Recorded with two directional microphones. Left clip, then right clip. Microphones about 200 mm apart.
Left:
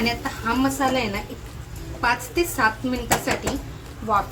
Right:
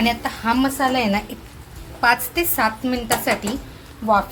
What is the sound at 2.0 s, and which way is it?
Speech, 50° right (ahead or behind).